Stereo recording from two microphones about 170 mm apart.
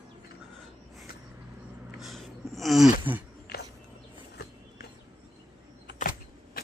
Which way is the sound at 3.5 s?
80° left.